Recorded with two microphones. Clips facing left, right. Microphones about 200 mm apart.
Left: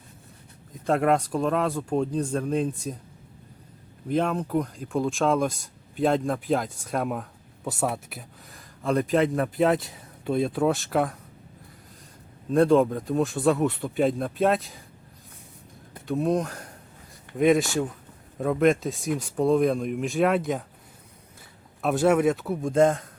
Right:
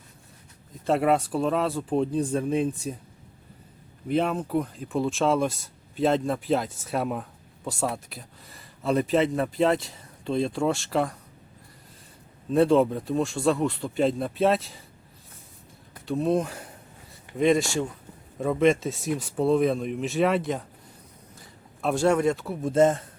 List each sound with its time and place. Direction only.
0.9 s speech: centre (ahead or behind)
4.1 s speech: 5° right (ahead or behind)
12.5 s speech: 5° right (ahead or behind)
16.0 s speech: centre (ahead or behind)
21.8 s speech: centre (ahead or behind)